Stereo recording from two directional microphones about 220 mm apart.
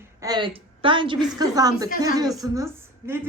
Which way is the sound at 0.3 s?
20° right (ahead or behind).